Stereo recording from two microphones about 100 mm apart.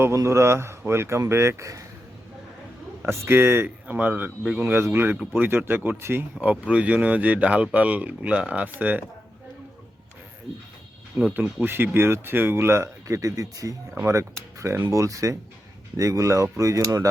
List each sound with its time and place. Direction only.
0.0 s speech: 30° right (ahead or behind)
3.0 s speech: 25° right (ahead or behind)
11.3 s speech: 20° right (ahead or behind)